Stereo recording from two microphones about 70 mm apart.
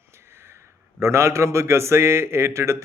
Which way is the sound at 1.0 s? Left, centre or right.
Right.